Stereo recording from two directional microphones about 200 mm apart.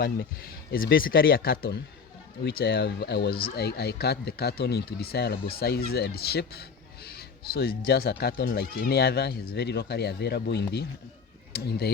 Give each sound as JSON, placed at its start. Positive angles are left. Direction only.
{"t": 0.0, "sound": "speech", "side_deg": 50}